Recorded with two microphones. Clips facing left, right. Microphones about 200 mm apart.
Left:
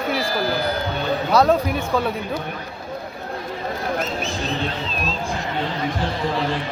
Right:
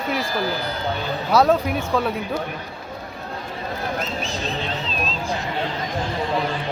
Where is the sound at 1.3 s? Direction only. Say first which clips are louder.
Even; 5° right (ahead or behind).